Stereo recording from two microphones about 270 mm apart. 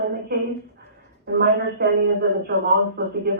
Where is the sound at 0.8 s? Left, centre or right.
Right.